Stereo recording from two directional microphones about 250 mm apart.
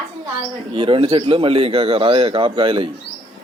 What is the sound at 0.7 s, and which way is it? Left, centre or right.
Speech, right.